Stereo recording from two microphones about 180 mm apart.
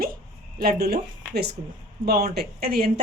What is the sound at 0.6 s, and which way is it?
Speech, 60° right (ahead or behind).